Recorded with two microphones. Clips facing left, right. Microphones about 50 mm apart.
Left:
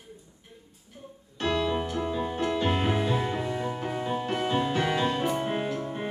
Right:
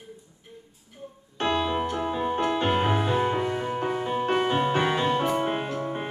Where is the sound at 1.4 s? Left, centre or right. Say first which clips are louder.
Right 2 dB; right.